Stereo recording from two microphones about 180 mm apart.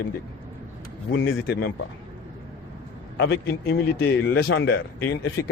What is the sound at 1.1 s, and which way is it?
Speech, 90° left.